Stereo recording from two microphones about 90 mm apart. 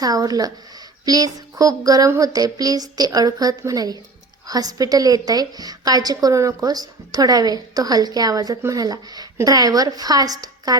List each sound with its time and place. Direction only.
0.0 s a woman's voice: 45° right (ahead or behind)